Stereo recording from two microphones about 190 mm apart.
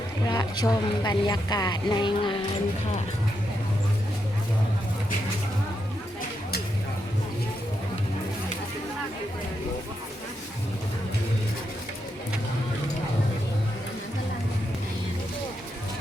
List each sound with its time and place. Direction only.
0.3 s speech: 20° left (ahead or behind)